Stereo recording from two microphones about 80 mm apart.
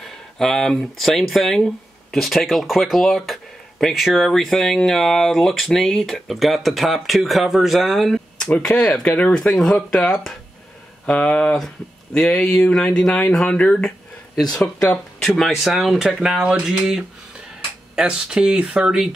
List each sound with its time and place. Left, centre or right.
0.0 s speech: centre
9.0 s speech: centre
9.3 s speech: centre
13.8 s a sound: centre
15.2 s speech: centre